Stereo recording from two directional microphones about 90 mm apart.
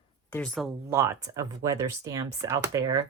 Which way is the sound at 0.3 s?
20° left (ahead or behind).